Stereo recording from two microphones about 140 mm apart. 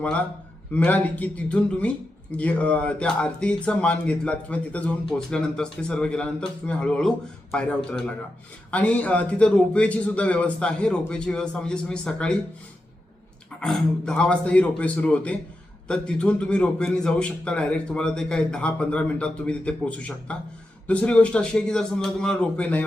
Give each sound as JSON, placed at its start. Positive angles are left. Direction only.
{"t": 0.7, "sound": "a man's voice", "side_deg": 10}
{"t": 13.6, "sound": "speech", "side_deg": 5}